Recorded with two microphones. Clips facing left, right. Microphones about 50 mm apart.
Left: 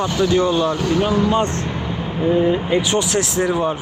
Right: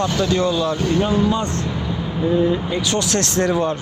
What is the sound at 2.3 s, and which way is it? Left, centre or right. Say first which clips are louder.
Speech: left 2 dB; left.